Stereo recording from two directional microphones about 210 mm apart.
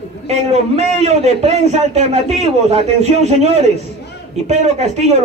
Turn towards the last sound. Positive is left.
turn(degrees=-30)  # may be behind; listen again after turning